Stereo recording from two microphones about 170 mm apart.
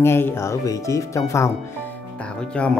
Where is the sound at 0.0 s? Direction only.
15° left (ahead or behind).